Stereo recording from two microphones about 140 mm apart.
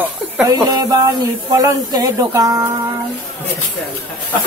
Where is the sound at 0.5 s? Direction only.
25° right (ahead or behind).